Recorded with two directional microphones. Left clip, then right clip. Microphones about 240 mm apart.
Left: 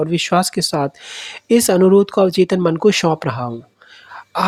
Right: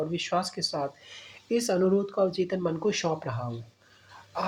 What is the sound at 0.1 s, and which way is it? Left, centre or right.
Speech, left.